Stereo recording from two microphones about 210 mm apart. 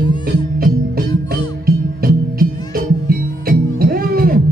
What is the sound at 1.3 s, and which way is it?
Music, 45° right (ahead or behind).